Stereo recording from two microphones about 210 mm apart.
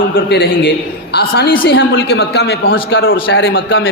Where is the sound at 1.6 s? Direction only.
65° left (ahead or behind).